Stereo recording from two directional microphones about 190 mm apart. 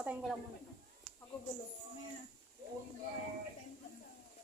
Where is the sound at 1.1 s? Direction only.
5° left (ahead or behind).